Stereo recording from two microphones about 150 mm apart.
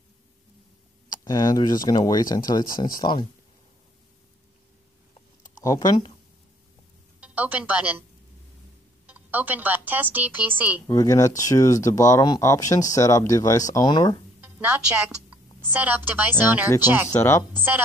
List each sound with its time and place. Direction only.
1.1 s speech: 25° left (ahead or behind)
5.6 s speech: 25° left (ahead or behind)
7.2 s speech: 10° right (ahead or behind)
9.0 s speech: 10° right (ahead or behind)
10.9 s speech: 20° left (ahead or behind)
14.4 s a woman's voice: 10° right (ahead or behind)
17.1 s speech: 20° left (ahead or behind)